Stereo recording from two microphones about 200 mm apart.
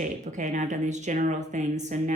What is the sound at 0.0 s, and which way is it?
Speech, 35° right (ahead or behind).